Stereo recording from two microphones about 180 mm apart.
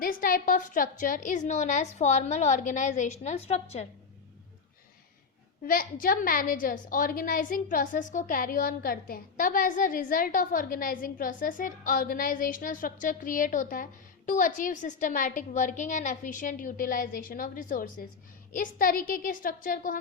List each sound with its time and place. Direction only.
0.0 s a woman's voice: 50° left (ahead or behind)
5.6 s a woman's voice: 50° left (ahead or behind)